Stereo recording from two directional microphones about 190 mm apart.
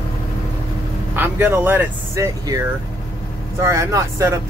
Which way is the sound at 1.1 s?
10° right (ahead or behind).